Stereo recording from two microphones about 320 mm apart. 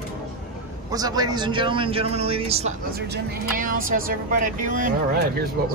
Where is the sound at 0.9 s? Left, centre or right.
Centre.